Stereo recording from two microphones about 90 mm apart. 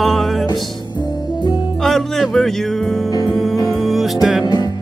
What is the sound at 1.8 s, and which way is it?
Music, 5° left (ahead or behind).